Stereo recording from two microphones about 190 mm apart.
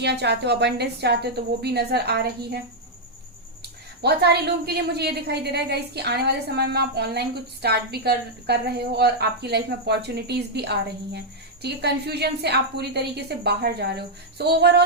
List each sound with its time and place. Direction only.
0.0 s a woman's voice: 60° right (ahead or behind)
3.6 s a woman's voice: 60° right (ahead or behind)